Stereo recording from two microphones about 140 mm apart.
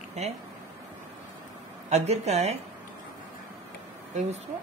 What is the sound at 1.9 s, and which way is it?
Speech, 50° right (ahead or behind).